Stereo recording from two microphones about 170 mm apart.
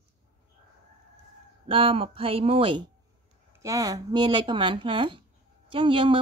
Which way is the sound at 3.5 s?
20° right (ahead or behind).